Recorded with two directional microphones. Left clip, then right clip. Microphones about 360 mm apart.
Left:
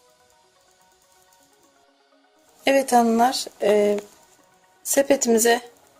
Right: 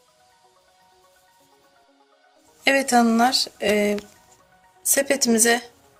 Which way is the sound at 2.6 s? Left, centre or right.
Centre.